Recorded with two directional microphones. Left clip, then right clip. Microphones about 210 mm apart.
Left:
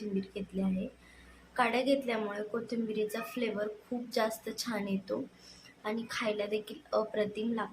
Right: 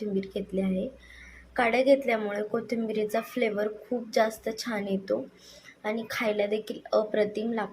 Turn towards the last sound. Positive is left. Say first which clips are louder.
# right 6 dB
turn(degrees=-20)  # may be behind; listen again after turning